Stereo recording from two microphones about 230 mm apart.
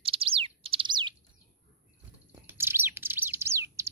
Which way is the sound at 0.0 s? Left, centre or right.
Right.